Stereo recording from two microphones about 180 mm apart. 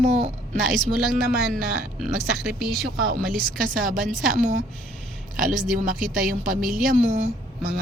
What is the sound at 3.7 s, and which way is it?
Speech, 50° right (ahead or behind).